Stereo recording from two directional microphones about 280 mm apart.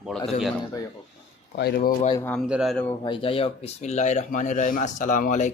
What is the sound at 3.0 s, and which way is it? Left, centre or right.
Speech, centre.